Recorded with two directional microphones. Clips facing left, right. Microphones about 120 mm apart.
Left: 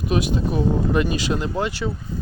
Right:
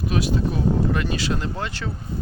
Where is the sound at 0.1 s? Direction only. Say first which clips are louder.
Left 2 dB; 20° left (ahead or behind).